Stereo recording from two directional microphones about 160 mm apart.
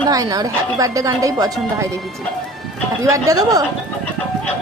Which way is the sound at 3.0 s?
20° right (ahead or behind).